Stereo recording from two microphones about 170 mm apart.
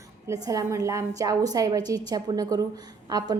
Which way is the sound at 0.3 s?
20° right (ahead or behind).